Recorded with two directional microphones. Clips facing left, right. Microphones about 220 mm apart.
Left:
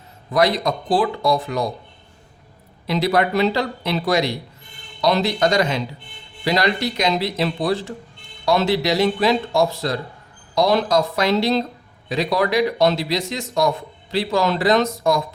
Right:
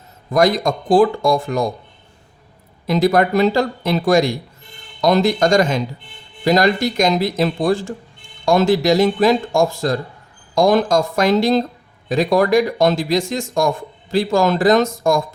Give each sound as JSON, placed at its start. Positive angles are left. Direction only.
{"t": 0.3, "sound": "speech", "side_deg": -45}
{"t": 2.8, "sound": "speech", "side_deg": -45}